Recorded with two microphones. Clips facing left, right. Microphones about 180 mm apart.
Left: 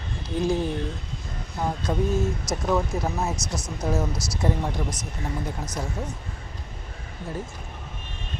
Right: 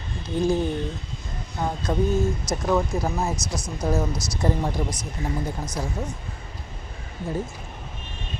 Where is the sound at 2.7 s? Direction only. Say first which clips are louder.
Right 2 dB; centre (ahead or behind).